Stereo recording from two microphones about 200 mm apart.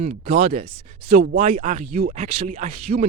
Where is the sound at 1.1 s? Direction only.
45° right (ahead or behind).